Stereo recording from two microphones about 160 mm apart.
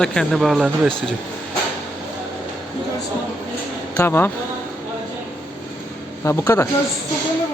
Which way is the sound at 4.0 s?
15° left (ahead or behind).